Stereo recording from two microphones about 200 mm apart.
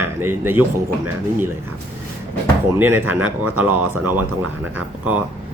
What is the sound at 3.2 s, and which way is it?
Speech, 90° right.